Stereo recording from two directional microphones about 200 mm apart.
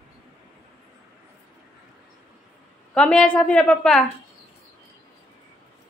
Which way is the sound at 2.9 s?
5° left (ahead or behind).